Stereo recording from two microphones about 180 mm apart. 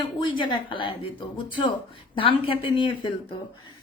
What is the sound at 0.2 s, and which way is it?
Speech, 25° left (ahead or behind).